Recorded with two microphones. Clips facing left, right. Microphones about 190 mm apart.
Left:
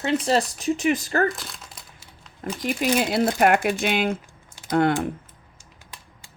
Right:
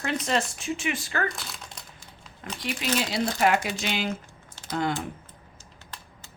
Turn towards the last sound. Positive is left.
turn(degrees=60)  # may be behind; listen again after turning